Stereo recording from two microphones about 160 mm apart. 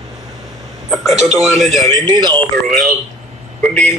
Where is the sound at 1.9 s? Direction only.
25° right (ahead or behind).